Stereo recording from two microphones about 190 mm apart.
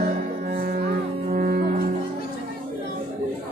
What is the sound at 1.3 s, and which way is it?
Music, 50° right (ahead or behind).